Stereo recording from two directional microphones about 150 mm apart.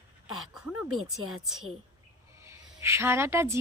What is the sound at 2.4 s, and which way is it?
Speech, 15° right (ahead or behind).